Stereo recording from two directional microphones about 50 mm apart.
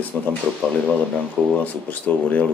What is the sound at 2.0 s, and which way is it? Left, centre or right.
Speech, left.